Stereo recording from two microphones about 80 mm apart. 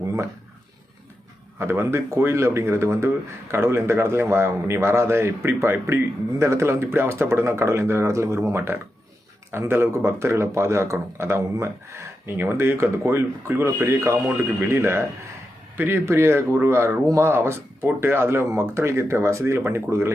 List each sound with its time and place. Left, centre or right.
1.5 s speech: right